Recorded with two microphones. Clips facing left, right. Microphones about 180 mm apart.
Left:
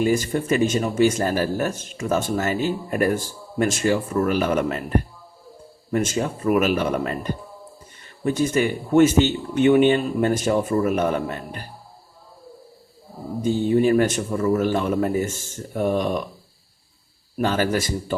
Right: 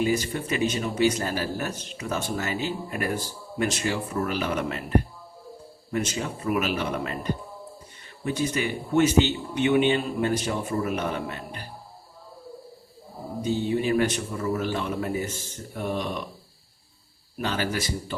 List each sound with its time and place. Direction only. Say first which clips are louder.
0.0 s speech: left 4 dB; 50° left (ahead or behind)
13.4 s speech: left 7 dB; 45° left (ahead or behind)
17.3 s speech: left 7 dB; 45° left (ahead or behind)